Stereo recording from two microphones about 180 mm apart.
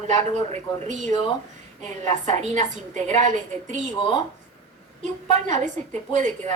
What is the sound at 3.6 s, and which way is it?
Speech, 40° right (ahead or behind).